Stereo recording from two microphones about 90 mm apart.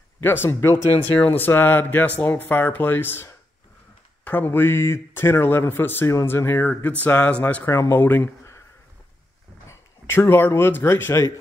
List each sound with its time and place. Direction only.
0.2 s speech: 25° left (ahead or behind)
1.2 s speech: 20° left (ahead or behind)
7.7 s speech: 35° left (ahead or behind)
8.0 s speech: 20° left (ahead or behind)
9.7 s speech: 30° left (ahead or behind)